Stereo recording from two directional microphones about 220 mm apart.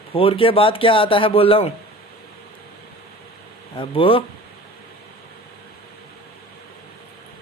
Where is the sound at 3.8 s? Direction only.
25° left (ahead or behind).